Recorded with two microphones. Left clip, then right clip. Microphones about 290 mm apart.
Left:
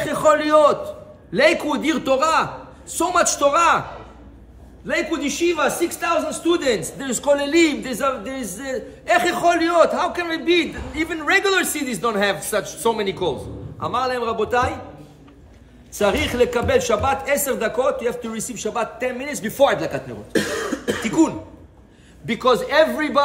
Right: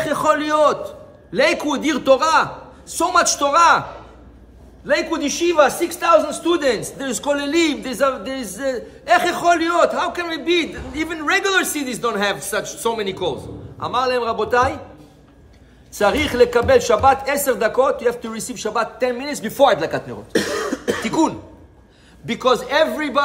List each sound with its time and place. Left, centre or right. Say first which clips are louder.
0.0 s a man's voice: left 1 dB; centre
4.8 s a man's voice: right 3 dB; centre
15.9 s speech: right 2 dB; centre
20.3 s cough: right 2 dB; right
21.0 s a man's voice: left 1 dB; centre